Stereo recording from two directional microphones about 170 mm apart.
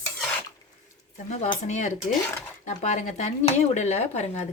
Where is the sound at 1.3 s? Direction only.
45° left (ahead or behind).